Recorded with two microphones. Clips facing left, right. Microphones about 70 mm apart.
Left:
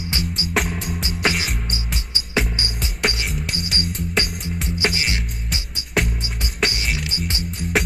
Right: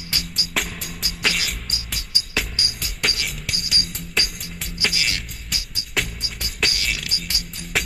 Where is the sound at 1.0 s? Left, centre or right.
Left.